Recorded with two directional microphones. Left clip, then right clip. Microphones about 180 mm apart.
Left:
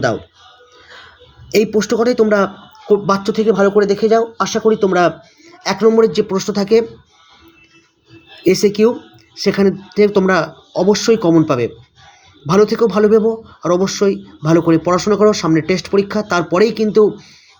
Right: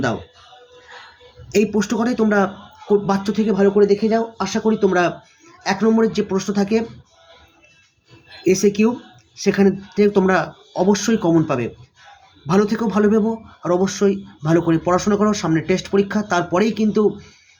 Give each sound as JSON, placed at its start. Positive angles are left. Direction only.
{"t": 1.5, "sound": "speech", "side_deg": 25}
{"t": 8.4, "sound": "speech", "side_deg": 25}